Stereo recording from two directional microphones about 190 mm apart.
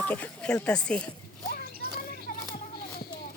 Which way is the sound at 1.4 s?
50° left (ahead or behind).